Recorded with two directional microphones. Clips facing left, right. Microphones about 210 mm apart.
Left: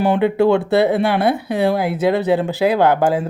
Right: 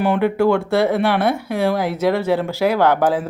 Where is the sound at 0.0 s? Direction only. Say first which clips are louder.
Left 2 dB; 25° left (ahead or behind).